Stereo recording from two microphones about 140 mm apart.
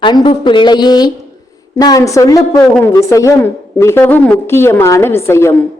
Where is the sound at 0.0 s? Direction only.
35° left (ahead or behind).